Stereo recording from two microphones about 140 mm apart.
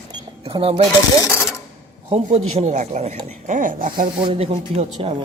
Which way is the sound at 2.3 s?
55° right (ahead or behind).